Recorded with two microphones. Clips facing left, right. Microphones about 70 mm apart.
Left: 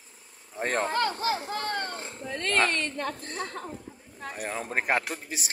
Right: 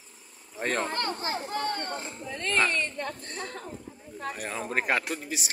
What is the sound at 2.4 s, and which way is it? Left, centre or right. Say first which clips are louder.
Speech: left 1 dB; left.